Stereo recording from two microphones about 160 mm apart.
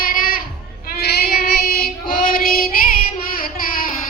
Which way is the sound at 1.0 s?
85° left.